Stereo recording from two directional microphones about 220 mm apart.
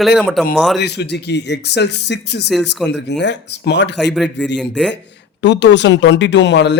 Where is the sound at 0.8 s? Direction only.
50° left (ahead or behind).